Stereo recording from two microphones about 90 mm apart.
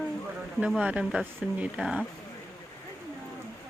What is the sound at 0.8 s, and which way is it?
Speech, 10° right (ahead or behind).